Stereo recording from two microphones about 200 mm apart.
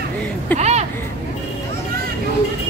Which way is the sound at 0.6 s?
35° right (ahead or behind).